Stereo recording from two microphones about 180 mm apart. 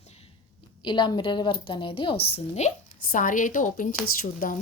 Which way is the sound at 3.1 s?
45° left (ahead or behind).